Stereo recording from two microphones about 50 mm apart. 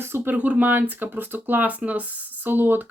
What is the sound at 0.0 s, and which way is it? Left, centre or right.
Speech, right.